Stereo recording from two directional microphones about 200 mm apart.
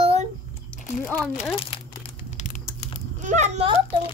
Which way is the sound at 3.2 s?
35° right (ahead or behind).